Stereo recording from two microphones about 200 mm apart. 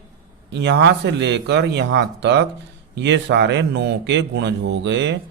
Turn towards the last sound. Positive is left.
turn(degrees=-60)  # may be behind; listen again after turning